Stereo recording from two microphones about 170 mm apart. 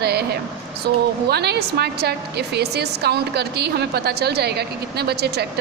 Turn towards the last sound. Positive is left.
turn(degrees=-75)  # may be behind; listen again after turning